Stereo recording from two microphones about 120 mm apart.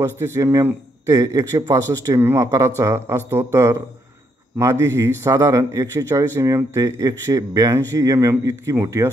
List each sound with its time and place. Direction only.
0.0 s a man's voice: 25° right (ahead or behind)